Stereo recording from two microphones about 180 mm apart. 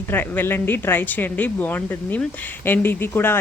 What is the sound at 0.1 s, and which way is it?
Speech, 10° left (ahead or behind).